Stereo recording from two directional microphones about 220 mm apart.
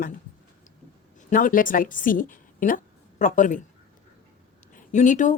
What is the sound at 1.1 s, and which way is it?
A woman's voice, 40° left (ahead or behind).